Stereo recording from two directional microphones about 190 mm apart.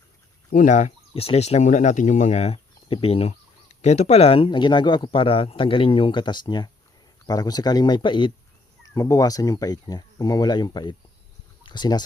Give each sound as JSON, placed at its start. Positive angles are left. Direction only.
{"t": 0.5, "sound": "speech", "side_deg": 40}